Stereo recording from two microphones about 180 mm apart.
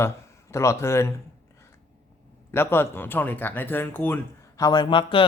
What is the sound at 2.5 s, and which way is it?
Speech, 15° left (ahead or behind).